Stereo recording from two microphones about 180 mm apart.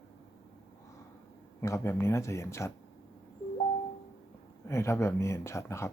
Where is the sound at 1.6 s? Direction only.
15° left (ahead or behind).